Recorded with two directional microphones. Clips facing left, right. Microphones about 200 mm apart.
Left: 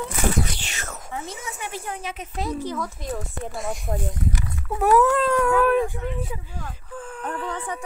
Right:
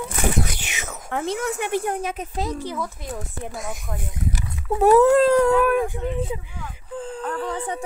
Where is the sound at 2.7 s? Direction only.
5° right (ahead or behind).